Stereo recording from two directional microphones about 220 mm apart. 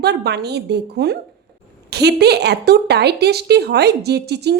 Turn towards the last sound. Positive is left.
turn(degrees=-50)  # may be behind; listen again after turning